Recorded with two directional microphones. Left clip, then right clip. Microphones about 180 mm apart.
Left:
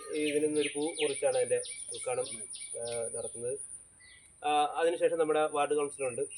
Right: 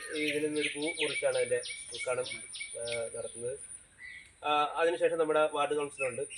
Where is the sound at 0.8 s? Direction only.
25° left (ahead or behind).